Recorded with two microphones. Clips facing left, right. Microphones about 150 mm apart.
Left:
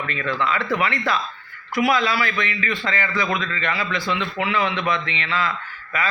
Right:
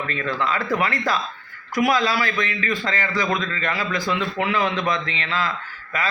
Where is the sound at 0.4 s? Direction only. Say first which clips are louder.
Even; 40° right (ahead or behind).